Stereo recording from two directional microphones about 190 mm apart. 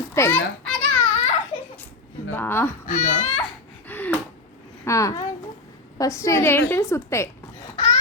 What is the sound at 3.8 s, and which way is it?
Gasp, 10° left (ahead or behind).